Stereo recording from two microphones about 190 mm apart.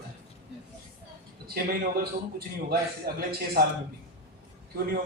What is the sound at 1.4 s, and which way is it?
A man's voice, 55° right (ahead or behind).